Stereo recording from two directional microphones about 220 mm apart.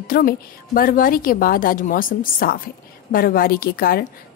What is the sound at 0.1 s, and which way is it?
A woman's voice, 45° left (ahead or behind).